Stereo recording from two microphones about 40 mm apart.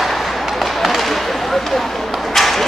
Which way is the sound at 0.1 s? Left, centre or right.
Centre.